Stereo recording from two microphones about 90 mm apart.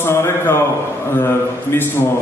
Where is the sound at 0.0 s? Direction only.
25° left (ahead or behind).